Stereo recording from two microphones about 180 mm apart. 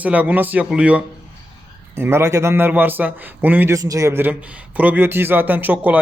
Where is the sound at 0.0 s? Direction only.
10° right (ahead or behind).